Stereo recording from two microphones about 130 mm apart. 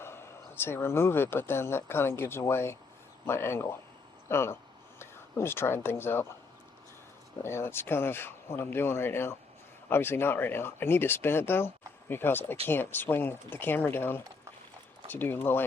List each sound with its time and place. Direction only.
0.0 s speech: 20° left (ahead or behind)
7.4 s speech: 20° left (ahead or behind)